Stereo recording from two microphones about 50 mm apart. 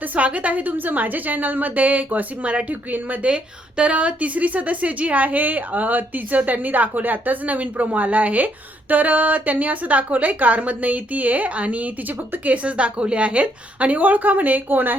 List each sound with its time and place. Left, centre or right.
0.0 s a woman's voice: right